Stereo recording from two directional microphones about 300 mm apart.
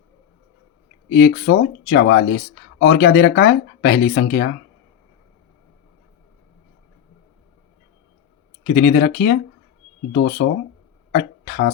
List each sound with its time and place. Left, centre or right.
1.1 s speech: left
8.6 s speech: left
11.1 s a sound: left